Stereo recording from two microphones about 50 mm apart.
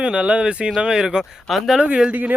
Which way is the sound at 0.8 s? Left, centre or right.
Centre.